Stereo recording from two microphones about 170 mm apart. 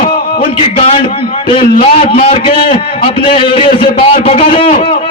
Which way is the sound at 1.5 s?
35° left (ahead or behind).